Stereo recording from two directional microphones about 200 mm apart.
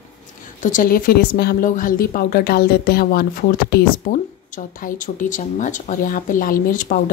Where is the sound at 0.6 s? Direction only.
40° left (ahead or behind).